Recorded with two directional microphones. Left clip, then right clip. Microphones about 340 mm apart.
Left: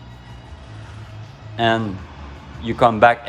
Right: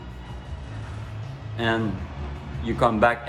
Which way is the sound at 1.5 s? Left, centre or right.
Left.